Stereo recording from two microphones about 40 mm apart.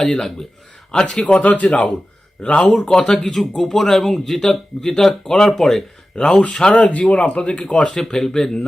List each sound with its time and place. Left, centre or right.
0.0 s a man's voice: centre
1.3 s speech: left; by 5.8 s centre
6.1 s speech: left
6.7 s speech: left
7.9 s speech: centre